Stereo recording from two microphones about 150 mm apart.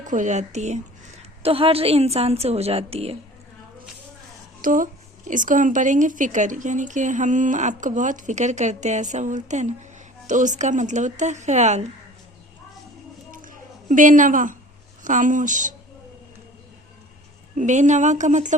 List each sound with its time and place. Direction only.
0.0 s a woman's voice: 55° right (ahead or behind); by 3.2 s 40° right (ahead or behind)
4.6 s a woman's voice: 65° right (ahead or behind)
13.3 s a sound: 65° right (ahead or behind)
15.0 s a woman's voice: 60° right (ahead or behind)
17.6 s speech: 55° right (ahead or behind)